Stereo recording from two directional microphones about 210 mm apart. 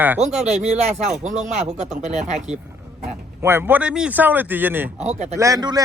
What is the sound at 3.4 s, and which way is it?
A man's voice, 10° right (ahead or behind).